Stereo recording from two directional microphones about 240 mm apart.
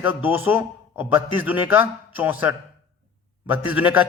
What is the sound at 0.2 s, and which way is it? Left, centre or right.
A man's voice, centre.